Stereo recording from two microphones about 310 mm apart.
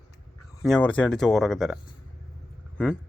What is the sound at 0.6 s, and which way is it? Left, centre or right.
Speech, centre.